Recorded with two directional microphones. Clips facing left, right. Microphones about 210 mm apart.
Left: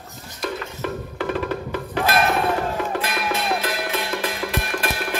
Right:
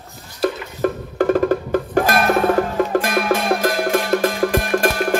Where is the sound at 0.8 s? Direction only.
45° right (ahead or behind).